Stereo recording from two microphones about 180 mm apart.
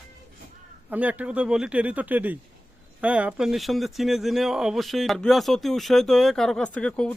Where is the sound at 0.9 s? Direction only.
10° right (ahead or behind).